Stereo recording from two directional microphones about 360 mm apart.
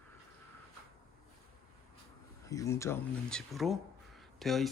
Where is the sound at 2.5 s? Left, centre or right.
Centre.